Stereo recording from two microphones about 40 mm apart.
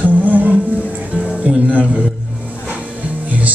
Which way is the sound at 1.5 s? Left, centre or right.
Centre.